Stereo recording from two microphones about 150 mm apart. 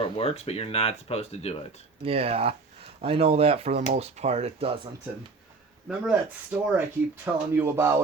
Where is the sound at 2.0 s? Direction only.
40° right (ahead or behind).